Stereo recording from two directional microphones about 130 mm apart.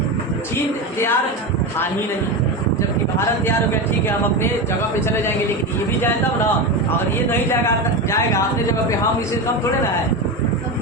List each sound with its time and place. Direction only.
0.9 s a woman's voice: 20° left (ahead or behind)
3.2 s speech: 20° left (ahead or behind)